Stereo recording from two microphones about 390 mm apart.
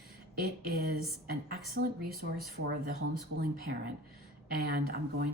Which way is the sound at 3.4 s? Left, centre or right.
Right.